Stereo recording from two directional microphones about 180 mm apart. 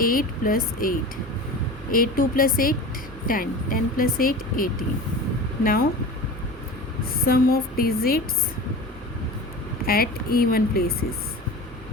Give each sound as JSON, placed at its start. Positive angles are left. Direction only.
{"t": 0.0, "sound": "a woman's voice", "side_deg": 50}
{"t": 7.0, "sound": "a woman's voice", "side_deg": 55}
{"t": 9.8, "sound": "a woman's voice", "side_deg": 55}